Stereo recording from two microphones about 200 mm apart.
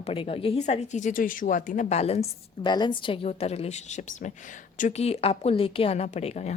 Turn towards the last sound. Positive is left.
turn(degrees=35)  # may be behind; listen again after turning